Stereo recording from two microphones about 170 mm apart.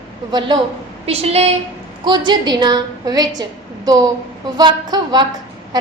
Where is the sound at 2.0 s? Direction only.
25° right (ahead or behind).